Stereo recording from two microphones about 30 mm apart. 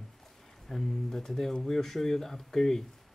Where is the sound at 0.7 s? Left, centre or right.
Centre.